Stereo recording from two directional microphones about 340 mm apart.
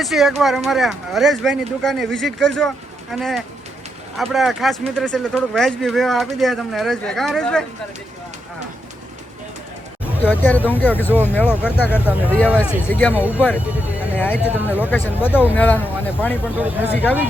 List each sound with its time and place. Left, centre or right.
0.0 s speech: centre
10.2 s speech: centre